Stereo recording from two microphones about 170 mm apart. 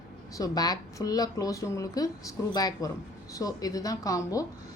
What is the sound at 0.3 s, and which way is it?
A woman's voice, 20° left (ahead or behind).